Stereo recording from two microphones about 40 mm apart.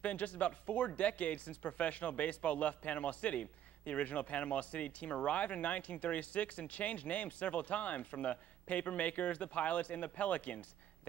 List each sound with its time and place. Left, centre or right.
0.0 s speech: left